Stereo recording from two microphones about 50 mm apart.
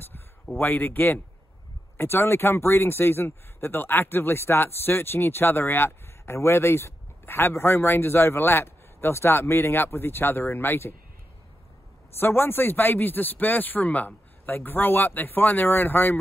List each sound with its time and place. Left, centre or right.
0.5 s a man's voice: left
2.0 s speech: left
12.2 s a man's voice: left